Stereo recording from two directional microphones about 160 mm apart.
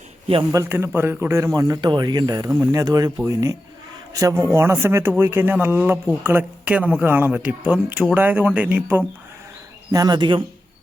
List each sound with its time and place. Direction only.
0.5 s a man's voice: 15° right (ahead or behind)
9.9 s a man's voice: 25° right (ahead or behind)